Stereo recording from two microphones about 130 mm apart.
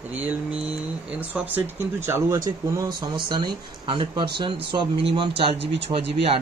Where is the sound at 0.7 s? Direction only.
10° right (ahead or behind).